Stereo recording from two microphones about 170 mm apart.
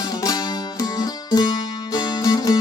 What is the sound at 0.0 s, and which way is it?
Music, 20° left (ahead or behind).